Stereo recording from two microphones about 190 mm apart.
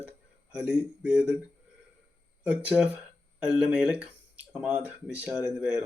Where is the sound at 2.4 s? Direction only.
5° right (ahead or behind).